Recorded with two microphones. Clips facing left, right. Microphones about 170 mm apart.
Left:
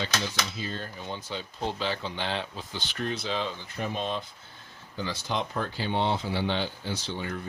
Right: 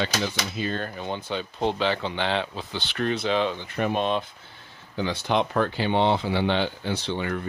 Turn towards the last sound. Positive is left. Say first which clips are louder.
# right 6 dB
turn(degrees=-65)  # may be behind; listen again after turning